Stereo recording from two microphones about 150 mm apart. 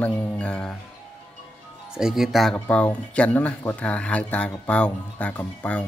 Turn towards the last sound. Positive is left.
turn(degrees=10)  # may be behind; listen again after turning